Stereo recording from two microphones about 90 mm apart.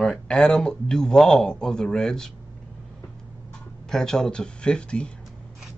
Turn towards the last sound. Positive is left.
turn(degrees=10)  # may be behind; listen again after turning